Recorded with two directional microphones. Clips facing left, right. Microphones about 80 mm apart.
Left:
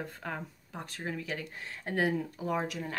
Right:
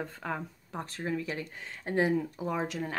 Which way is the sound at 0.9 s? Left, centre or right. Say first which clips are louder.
Right 3 dB; right.